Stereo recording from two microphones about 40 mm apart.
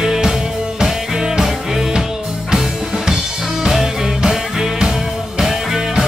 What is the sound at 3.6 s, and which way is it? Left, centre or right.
Music, centre.